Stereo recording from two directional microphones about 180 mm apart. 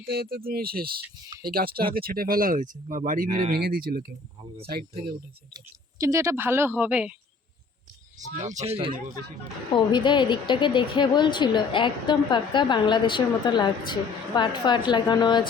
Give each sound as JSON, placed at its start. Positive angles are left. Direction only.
{"t": 0.0, "sound": "speech", "side_deg": -60}
{"t": 3.2, "sound": "speech", "side_deg": -25}
{"t": 3.6, "sound": "speech", "side_deg": -55}
{"t": 5.5, "sound": "speech", "side_deg": -15}
{"t": 8.2, "sound": "speech", "side_deg": -40}
{"t": 9.7, "sound": "a woman's voice", "side_deg": 25}